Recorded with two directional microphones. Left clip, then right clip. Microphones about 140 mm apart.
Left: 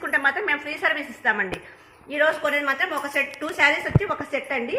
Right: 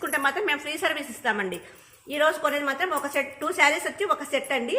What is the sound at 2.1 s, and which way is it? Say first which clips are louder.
A woman's voice: left 2 dB; 60° right (ahead or behind).